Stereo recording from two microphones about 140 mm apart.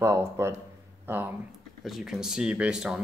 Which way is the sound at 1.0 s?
15° right (ahead or behind).